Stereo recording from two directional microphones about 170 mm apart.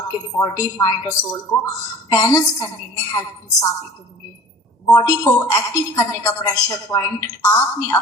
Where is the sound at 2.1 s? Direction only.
20° left (ahead or behind).